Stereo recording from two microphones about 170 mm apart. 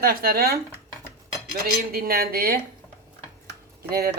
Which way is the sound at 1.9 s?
60° right (ahead or behind).